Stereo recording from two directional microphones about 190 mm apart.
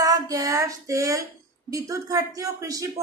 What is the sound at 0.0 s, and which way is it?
Child singing, 20° right (ahead or behind).